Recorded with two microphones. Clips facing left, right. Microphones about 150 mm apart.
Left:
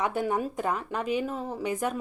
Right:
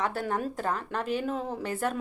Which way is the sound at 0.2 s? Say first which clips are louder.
Left 2 dB; 5° left (ahead or behind).